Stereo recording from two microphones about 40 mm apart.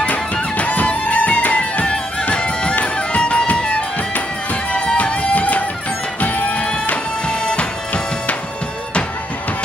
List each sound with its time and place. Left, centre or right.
0.0 s music: left
4.9 s music: left